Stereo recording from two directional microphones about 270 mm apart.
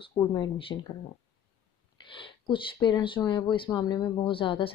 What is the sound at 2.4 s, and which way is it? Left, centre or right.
Speech, centre.